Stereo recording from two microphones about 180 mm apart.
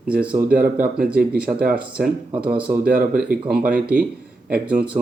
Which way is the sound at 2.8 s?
55° right (ahead or behind).